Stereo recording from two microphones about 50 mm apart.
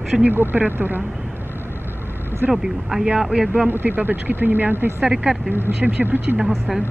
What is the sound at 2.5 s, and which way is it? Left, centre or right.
Speech, centre.